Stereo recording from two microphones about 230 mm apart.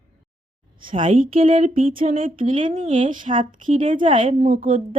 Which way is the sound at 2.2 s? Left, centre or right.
Right.